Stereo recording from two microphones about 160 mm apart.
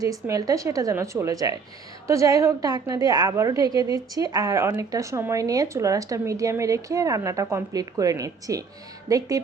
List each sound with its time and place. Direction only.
0.3 s a woman's voice: 20° right (ahead or behind)